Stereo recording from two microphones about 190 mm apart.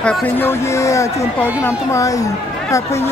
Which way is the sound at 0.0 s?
10° left (ahead or behind).